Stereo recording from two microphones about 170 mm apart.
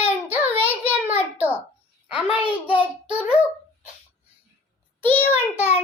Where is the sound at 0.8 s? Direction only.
10° right (ahead or behind).